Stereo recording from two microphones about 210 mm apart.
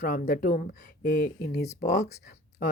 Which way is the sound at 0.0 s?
45° left (ahead or behind).